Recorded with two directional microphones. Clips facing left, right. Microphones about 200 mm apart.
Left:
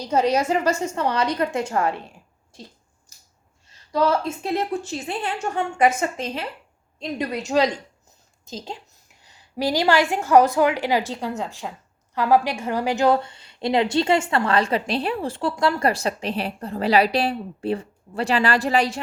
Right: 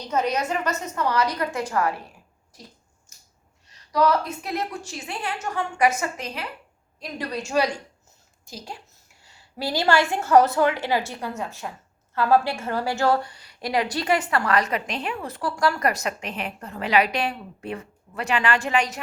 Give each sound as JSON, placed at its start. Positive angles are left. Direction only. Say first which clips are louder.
{"t": 0.1, "sound": "a woman's voice", "louder": "left 5 dB", "side_deg": 30}
{"t": 3.1, "sound": "scissors", "louder": "even", "side_deg": 35}
{"t": 3.9, "sound": "a woman's voice", "louder": "left 1 dB", "side_deg": 25}